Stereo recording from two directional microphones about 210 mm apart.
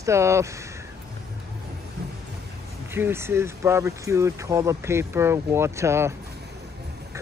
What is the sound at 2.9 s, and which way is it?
Speech, 10° right (ahead or behind).